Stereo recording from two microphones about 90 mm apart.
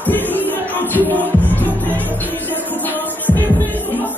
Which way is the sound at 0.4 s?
20° left (ahead or behind).